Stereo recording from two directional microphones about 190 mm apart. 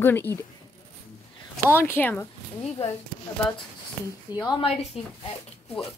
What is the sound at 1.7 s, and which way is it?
Speech, 10° left (ahead or behind).